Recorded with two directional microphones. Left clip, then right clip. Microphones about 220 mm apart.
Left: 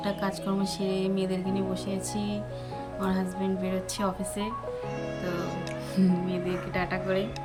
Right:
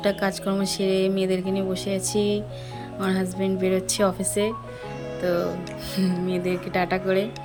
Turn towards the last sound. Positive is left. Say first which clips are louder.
# right 6 dB
turn(degrees=-20)  # may be behind; listen again after turning